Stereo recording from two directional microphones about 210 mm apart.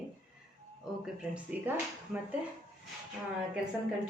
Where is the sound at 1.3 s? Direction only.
5° right (ahead or behind).